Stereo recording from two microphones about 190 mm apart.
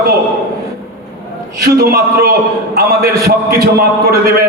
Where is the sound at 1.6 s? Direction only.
55° right (ahead or behind).